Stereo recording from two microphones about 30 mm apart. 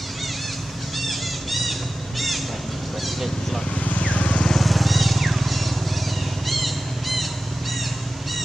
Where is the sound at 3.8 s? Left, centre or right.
Left.